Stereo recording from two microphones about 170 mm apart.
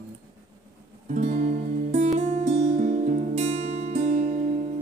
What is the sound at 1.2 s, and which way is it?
Music, 40° right (ahead or behind).